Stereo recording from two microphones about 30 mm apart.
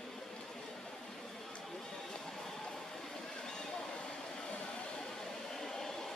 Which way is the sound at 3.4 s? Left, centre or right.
Left.